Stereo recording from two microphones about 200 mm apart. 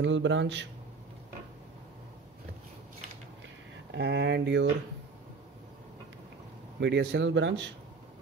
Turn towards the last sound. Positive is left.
turn(degrees=-65)  # may be behind; listen again after turning